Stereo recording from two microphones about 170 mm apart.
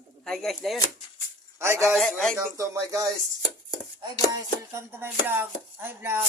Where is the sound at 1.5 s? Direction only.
15° right (ahead or behind).